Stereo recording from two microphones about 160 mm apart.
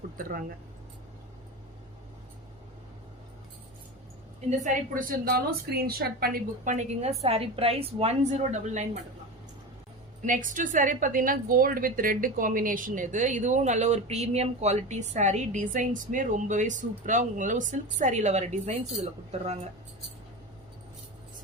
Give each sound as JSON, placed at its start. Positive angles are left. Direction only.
{"t": 0.2, "sound": "a woman's voice", "side_deg": -60}
{"t": 4.4, "sound": "a woman's voice", "side_deg": -45}
{"t": 10.2, "sound": "a woman's voice", "side_deg": -55}